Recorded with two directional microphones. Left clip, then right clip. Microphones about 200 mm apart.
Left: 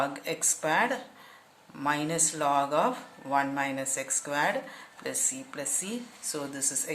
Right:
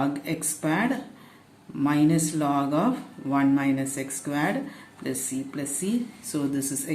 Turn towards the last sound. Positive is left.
turn(degrees=15)  # may be behind; listen again after turning